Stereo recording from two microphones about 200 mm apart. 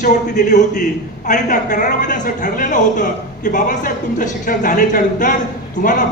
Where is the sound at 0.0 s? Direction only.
40° left (ahead or behind).